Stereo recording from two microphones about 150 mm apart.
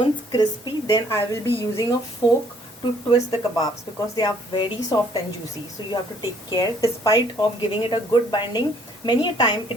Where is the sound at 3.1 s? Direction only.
25° left (ahead or behind).